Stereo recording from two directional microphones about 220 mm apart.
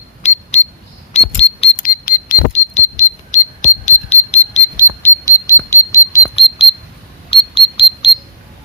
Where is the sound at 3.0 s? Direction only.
35° left (ahead or behind).